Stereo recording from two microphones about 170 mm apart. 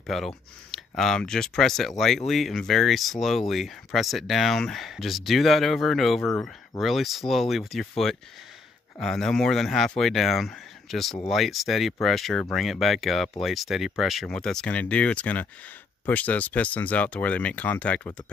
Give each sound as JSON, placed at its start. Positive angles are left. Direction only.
{"t": 0.0, "sound": "speech", "side_deg": 0}